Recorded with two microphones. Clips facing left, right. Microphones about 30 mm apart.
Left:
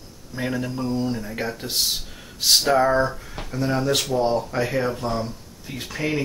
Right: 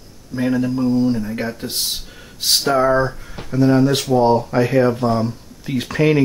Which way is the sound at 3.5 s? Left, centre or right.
Centre.